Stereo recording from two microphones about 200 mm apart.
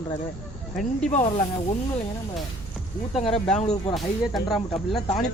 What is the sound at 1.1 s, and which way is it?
Speech, 30° left (ahead or behind).